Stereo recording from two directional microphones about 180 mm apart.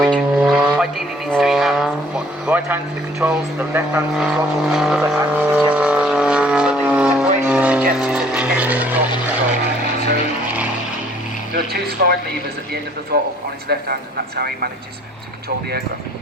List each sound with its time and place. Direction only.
0.0 s vehicle: 5° right (ahead or behind)
4.2 s vehicle: centre (ahead or behind)
11.5 s a man's voice: 60° right (ahead or behind)
13.1 s a man's voice: 60° right (ahead or behind)